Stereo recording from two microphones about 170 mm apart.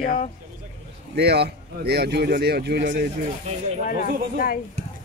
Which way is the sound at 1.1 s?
75° right (ahead or behind).